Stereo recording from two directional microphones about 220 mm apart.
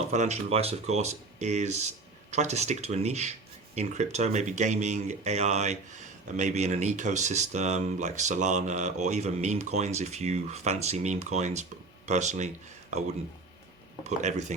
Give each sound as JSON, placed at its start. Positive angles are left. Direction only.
{"t": 0.0, "sound": "speech", "side_deg": -30}
{"t": 14.2, "sound": "speech", "side_deg": -30}